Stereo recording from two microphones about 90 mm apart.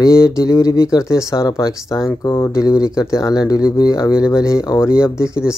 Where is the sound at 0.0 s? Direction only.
35° left (ahead or behind).